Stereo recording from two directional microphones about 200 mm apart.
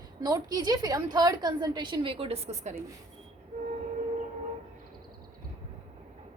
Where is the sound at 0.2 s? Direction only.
20° right (ahead or behind).